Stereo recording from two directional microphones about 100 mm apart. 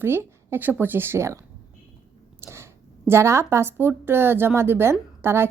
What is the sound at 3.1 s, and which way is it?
A woman's voice, 30° right (ahead or behind).